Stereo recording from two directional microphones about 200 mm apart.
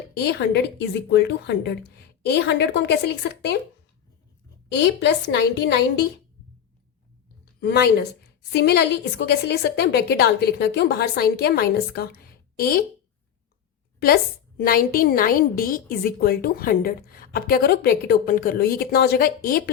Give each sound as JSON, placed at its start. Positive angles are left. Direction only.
{"t": 0.2, "sound": "a woman's voice", "side_deg": 55}
{"t": 4.8, "sound": "a woman's voice", "side_deg": 60}
{"t": 7.6, "sound": "a woman's voice", "side_deg": 55}
{"t": 14.6, "sound": "a woman's voice", "side_deg": 45}